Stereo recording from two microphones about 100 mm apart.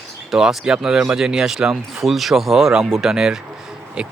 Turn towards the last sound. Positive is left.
turn(degrees=-10)  # may be behind; listen again after turning